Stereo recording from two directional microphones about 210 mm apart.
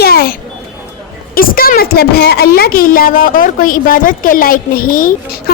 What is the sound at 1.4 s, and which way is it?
A woman's voice, 45° left (ahead or behind).